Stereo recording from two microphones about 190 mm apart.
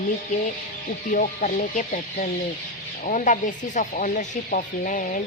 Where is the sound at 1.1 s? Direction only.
40° left (ahead or behind).